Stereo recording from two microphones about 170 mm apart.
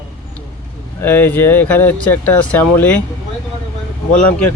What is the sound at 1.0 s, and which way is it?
Speech, 10° left (ahead or behind).